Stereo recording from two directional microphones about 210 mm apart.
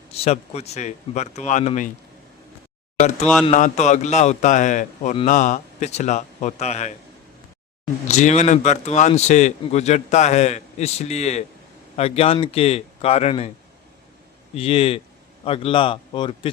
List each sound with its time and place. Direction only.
0.2 s a man's voice: 30° left (ahead or behind)
3.4 s a man's voice: 35° left (ahead or behind)
8.0 s a man's voice: 35° left (ahead or behind)
14.5 s speech: 30° left (ahead or behind)